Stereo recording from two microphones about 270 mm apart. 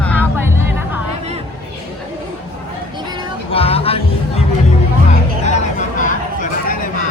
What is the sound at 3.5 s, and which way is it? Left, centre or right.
Music, left.